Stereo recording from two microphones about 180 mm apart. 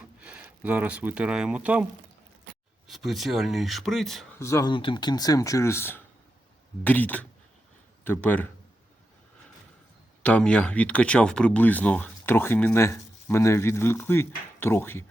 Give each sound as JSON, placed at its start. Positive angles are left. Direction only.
{"t": 0.2, "sound": "speech", "side_deg": -10}
{"t": 4.4, "sound": "speech", "side_deg": 15}
{"t": 10.2, "sound": "speech", "side_deg": 5}